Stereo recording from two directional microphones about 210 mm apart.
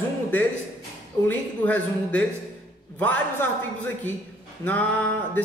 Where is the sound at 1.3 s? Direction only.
5° left (ahead or behind).